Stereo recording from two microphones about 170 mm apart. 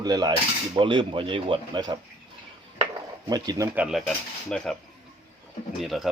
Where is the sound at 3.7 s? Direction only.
5° right (ahead or behind).